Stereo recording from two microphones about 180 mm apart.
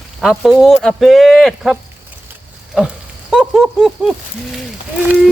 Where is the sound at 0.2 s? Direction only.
Centre (ahead or behind).